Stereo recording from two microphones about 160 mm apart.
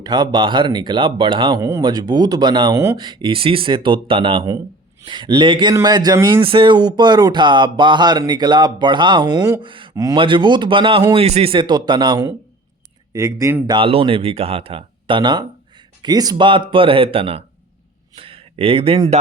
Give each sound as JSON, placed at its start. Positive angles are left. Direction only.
{"t": 0.0, "sound": "speech", "side_deg": -25}
{"t": 9.9, "sound": "speech", "side_deg": -20}
{"t": 10.2, "sound": "speech", "side_deg": -30}
{"t": 13.1, "sound": "speech", "side_deg": -20}
{"t": 13.7, "sound": "speech", "side_deg": -35}
{"t": 18.1, "sound": "a sound", "side_deg": -35}